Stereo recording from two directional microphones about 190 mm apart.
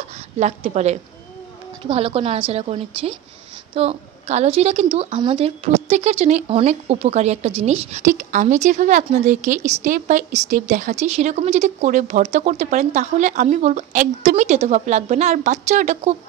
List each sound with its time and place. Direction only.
0.4 s a woman's voice: 35° right (ahead or behind)